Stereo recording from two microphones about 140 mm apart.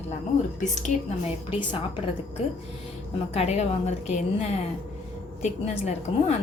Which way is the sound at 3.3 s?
50° left (ahead or behind).